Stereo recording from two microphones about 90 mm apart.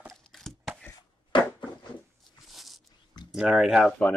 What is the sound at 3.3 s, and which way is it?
Speech, 10° right (ahead or behind).